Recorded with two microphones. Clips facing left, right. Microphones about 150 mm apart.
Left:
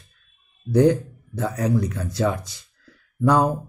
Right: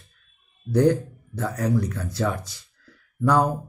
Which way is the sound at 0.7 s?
10° left (ahead or behind).